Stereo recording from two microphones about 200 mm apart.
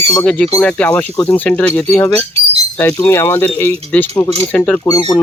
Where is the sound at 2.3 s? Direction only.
30° right (ahead or behind).